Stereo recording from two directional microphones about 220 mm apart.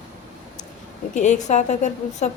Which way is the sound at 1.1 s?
35° left (ahead or behind).